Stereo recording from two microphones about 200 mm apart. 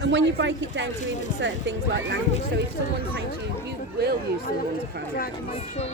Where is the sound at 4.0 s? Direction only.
50° right (ahead or behind).